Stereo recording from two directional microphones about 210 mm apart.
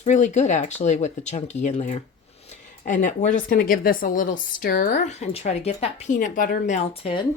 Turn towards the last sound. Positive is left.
turn(degrees=25)  # may be behind; listen again after turning